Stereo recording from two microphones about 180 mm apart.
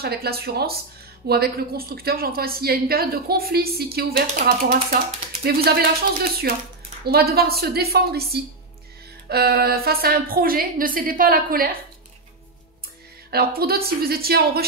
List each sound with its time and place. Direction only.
0.0 s a woman's voice: 60° right (ahead or behind)
5.4 s a woman's voice: 60° right (ahead or behind)
13.3 s a woman's voice: 60° right (ahead or behind)